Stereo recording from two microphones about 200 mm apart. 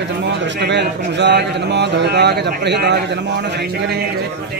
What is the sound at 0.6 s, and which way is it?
Speech, 60° right (ahead or behind).